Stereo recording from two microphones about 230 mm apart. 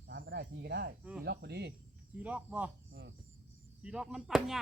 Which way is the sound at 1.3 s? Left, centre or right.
Right.